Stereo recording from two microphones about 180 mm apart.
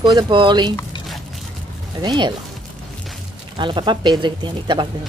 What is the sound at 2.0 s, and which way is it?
Speech, 25° right (ahead or behind).